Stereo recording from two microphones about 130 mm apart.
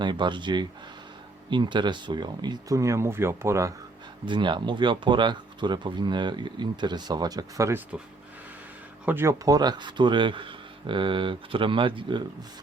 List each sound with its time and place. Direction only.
0.0 s speech: 35° right (ahead or behind); by 3.7 s 20° right (ahead or behind)
4.3 s speech: 40° right (ahead or behind)
9.0 s speech: 20° right (ahead or behind); by 12.2 s 40° right (ahead or behind)